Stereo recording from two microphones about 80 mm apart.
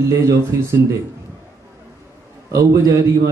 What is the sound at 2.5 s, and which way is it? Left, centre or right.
Speech, right.